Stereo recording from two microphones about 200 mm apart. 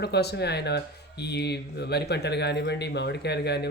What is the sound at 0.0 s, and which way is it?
Speech, 55° left (ahead or behind).